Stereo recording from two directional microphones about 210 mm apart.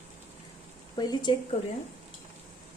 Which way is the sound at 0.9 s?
20° left (ahead or behind).